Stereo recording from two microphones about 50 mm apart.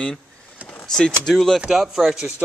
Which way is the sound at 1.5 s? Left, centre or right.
Centre.